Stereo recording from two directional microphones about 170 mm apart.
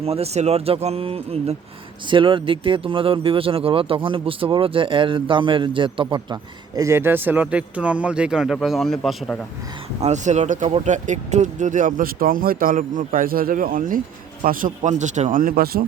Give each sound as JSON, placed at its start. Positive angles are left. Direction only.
{"t": 0.0, "sound": "a man's voice", "side_deg": -35}
{"t": 10.0, "sound": "speech", "side_deg": -45}